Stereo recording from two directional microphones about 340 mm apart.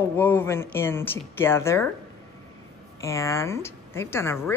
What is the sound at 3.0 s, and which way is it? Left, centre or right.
A woman's voice, centre.